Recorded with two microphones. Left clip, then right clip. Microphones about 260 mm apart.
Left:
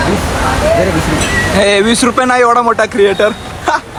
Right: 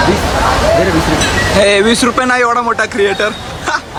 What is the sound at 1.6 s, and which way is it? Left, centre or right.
Speech, centre.